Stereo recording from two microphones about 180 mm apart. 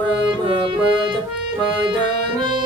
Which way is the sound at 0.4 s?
30° right (ahead or behind).